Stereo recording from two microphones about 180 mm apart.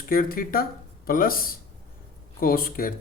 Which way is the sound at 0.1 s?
55° left (ahead or behind).